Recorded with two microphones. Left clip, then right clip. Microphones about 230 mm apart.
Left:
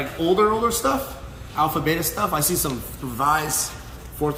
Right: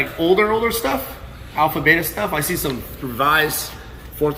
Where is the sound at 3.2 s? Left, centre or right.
Centre.